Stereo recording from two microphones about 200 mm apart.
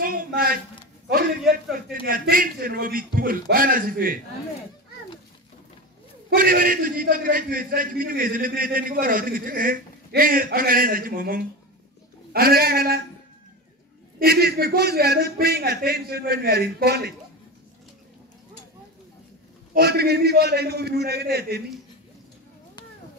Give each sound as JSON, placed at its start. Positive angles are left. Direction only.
{"t": 0.0, "sound": "a sound", "side_deg": -45}
{"t": 2.0, "sound": "a man's voice", "side_deg": -45}
{"t": 6.3, "sound": "a man's voice", "side_deg": -45}
{"t": 14.2, "sound": "a man's voice", "side_deg": -50}
{"t": 19.7, "sound": "a man's voice", "side_deg": -50}